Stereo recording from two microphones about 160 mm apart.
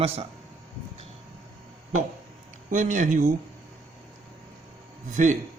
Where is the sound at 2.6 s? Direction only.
55° right (ahead or behind).